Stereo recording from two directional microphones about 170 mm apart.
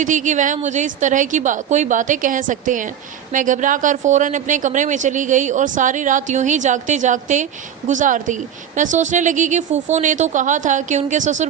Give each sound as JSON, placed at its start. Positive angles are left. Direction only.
{"t": 0.0, "sound": "a woman's voice", "side_deg": -45}